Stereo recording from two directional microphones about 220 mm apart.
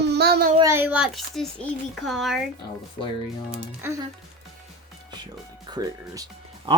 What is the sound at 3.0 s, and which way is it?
Speech, 30° left (ahead or behind).